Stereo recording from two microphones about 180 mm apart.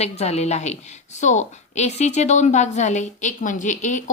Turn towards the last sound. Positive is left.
turn(degrees=45)  # may be behind; listen again after turning